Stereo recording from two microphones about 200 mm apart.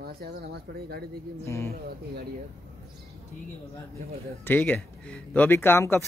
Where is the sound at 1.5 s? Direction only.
15° left (ahead or behind).